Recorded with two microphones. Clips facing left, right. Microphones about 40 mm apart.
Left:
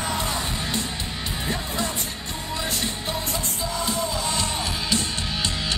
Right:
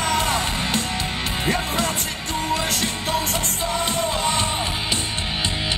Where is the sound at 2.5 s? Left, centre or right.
Right.